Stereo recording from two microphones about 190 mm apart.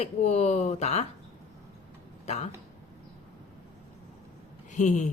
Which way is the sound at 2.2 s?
35° left (ahead or behind).